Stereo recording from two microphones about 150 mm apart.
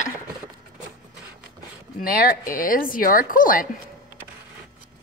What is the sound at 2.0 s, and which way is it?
A woman's voice, 75° left (ahead or behind).